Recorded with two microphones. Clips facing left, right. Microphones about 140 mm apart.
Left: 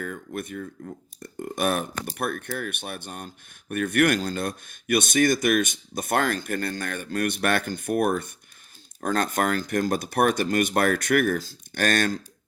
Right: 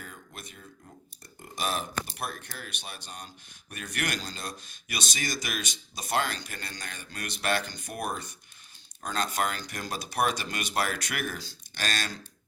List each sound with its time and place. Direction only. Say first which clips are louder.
0.0 s speech: left 13 dB; 55° left (ahead or behind)